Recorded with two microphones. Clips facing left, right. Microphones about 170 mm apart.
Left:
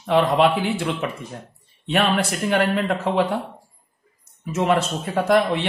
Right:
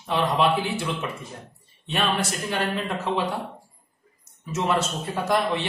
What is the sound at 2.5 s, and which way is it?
Speech, 60° left (ahead or behind).